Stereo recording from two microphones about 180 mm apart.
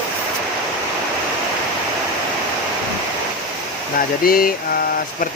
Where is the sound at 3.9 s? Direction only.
55° left (ahead or behind).